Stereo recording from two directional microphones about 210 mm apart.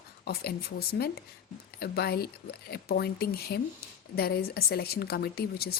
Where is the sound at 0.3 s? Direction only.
50° left (ahead or behind).